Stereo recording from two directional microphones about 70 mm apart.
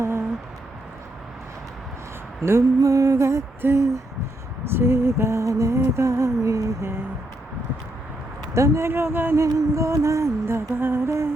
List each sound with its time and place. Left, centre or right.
2.4 s music: right
3.6 s humming: right
4.7 s music: right
8.5 s music: right
8.9 s humming: right
9.3 s music: right
10.8 s humming: right